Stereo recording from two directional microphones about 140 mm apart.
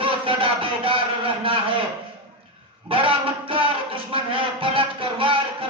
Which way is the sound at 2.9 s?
40° right (ahead or behind).